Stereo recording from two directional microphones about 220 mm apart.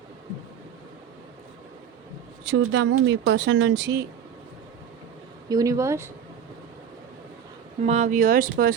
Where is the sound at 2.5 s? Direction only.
55° right (ahead or behind).